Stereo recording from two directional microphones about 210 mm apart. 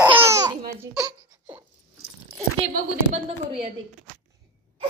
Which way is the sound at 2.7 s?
30° right (ahead or behind).